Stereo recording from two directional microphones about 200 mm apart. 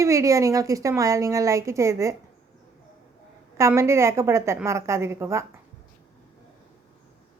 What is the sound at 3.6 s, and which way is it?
A woman's voice, 15° right (ahead or behind).